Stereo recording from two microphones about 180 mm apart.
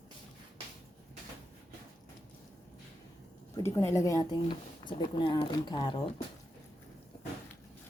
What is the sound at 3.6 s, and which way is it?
A woman's voice, 15° left (ahead or behind).